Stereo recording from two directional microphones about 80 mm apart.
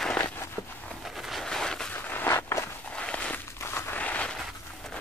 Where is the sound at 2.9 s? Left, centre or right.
Centre.